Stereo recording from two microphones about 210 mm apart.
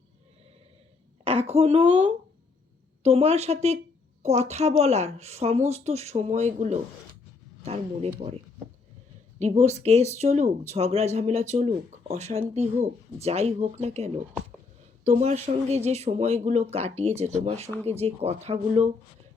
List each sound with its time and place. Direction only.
1.2 s a woman's voice: 30° right (ahead or behind)
9.4 s speech: 30° right (ahead or behind)